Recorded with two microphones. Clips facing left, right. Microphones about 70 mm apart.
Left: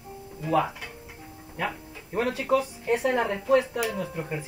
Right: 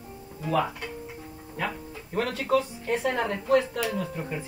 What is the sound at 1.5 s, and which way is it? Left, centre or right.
Speech, centre.